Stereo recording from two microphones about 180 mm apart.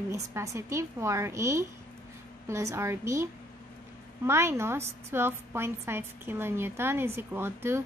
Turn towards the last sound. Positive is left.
turn(degrees=-15)  # may be behind; listen again after turning